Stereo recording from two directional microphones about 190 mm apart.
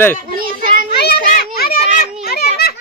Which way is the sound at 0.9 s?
60° left (ahead or behind).